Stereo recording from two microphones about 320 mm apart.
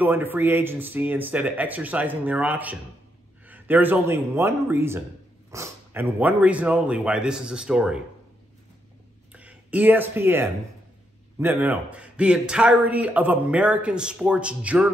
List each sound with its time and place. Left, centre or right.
0.0 s a man's voice: centre
9.3 s a man's voice: centre